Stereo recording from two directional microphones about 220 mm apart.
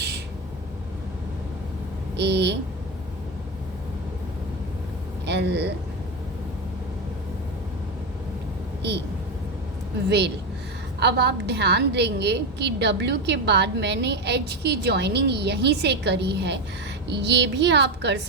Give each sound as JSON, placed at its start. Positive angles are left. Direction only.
{"t": 2.1, "sound": "a woman's voice", "side_deg": -50}
{"t": 5.2, "sound": "speech", "side_deg": -50}
{"t": 10.1, "sound": "a woman's voice", "side_deg": -50}